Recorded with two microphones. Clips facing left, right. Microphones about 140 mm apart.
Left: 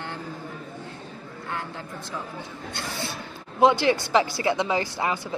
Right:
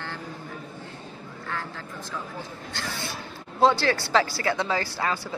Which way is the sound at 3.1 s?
15° left (ahead or behind).